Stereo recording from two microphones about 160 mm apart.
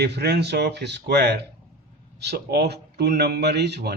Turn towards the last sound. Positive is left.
turn(degrees=-90)